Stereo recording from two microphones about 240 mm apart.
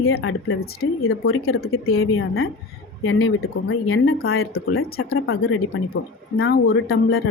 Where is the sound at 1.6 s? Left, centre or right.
Left.